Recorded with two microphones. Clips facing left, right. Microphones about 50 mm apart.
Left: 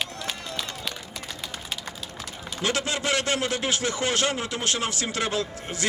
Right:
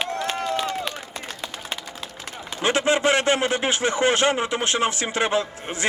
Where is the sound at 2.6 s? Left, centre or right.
Right.